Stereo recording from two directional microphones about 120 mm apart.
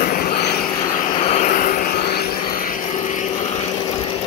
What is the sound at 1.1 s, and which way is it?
Vehicle, 60° left (ahead or behind).